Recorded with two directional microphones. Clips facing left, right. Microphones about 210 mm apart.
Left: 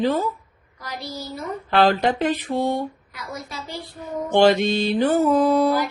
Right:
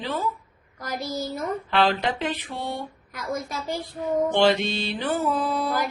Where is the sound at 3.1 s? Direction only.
50° right (ahead or behind).